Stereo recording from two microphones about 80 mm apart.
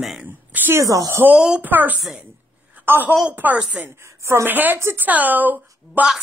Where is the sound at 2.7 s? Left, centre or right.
Right.